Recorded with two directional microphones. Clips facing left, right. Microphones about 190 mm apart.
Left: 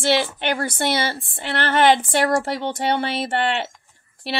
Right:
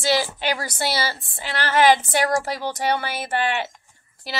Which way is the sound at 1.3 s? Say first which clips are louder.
Left 1 dB; 55° left (ahead or behind).